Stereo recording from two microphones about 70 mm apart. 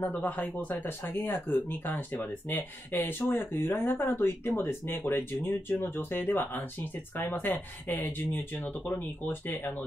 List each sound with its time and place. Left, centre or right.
0.0 s speech: left